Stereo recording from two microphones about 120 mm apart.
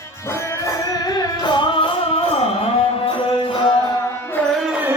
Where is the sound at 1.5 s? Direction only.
45° left (ahead or behind).